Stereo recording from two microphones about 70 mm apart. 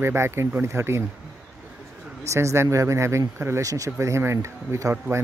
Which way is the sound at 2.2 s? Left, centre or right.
Right.